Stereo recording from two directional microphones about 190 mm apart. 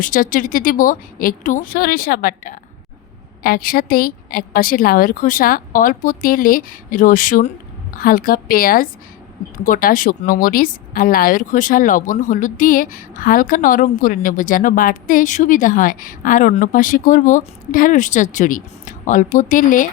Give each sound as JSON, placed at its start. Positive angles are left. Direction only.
{"t": 0.0, "sound": "speech", "side_deg": 45}